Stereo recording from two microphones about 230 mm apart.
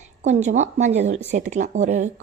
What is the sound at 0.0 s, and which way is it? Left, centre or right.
Speech, right.